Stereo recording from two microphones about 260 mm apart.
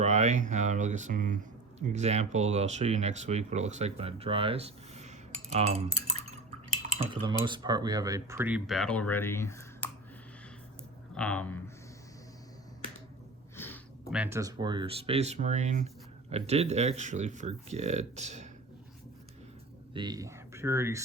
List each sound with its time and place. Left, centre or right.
0.0 s speech: right
7.1 s speech: centre
11.1 s speech: centre
13.6 s a sound: centre
14.1 s speech: centre; by 18.4 s right
19.9 s speech: centre